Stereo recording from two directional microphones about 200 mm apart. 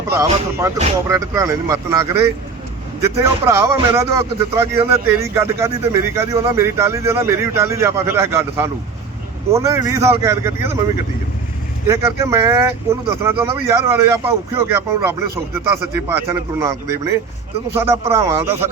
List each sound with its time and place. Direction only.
0.1 s speech: 15° right (ahead or behind)
11.9 s speech: 15° right (ahead or behind)
17.7 s speech: 15° right (ahead or behind)